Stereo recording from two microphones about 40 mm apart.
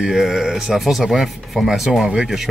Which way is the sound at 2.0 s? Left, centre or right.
Right.